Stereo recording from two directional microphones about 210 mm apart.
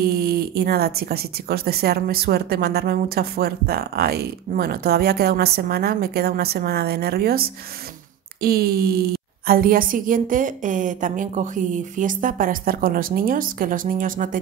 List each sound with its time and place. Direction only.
0.0 s a woman's voice: 45° right (ahead or behind)